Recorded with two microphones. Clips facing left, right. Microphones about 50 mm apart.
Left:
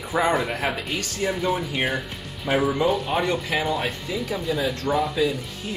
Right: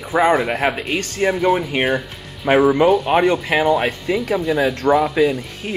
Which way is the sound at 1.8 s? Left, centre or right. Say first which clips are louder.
Right 6 dB; centre.